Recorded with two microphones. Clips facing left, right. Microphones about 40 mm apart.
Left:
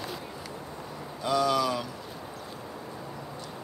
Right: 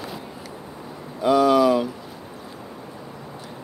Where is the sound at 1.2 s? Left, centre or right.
Right.